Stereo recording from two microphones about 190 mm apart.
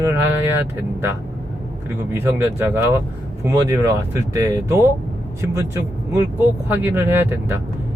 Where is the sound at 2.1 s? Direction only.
10° right (ahead or behind).